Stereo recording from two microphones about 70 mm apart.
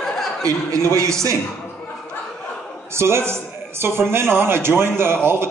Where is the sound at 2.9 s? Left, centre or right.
Right.